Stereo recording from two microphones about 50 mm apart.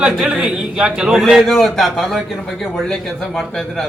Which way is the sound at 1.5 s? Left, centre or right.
Centre.